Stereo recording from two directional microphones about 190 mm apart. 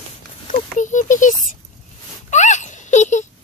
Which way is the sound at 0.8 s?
40° left (ahead or behind).